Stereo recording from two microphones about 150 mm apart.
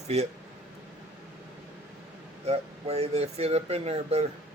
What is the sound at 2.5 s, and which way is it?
Speech, 45° right (ahead or behind).